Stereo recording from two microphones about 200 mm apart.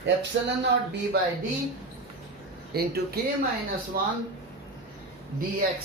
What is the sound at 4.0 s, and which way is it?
Speech, 50° right (ahead or behind).